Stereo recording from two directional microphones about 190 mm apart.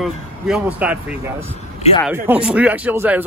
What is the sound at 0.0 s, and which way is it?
A man's voice, 5° right (ahead or behind).